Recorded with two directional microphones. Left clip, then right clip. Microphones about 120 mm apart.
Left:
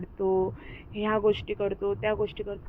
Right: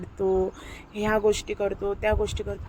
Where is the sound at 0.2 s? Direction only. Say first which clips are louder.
Right 2 dB; 20° right (ahead or behind).